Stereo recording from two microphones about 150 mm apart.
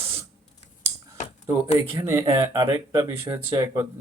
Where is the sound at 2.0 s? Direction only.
20° right (ahead or behind).